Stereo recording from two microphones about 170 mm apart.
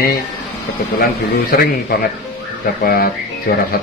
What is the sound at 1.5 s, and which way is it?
Speech, 60° left (ahead or behind).